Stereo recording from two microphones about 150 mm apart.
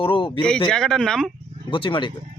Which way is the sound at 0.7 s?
5° left (ahead or behind).